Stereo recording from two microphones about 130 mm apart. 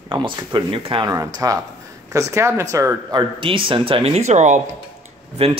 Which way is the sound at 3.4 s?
40° right (ahead or behind).